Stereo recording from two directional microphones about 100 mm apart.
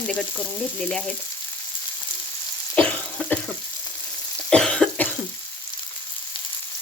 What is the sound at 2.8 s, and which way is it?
Cough, 15° left (ahead or behind).